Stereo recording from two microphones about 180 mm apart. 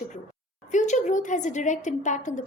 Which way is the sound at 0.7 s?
40° left (ahead or behind).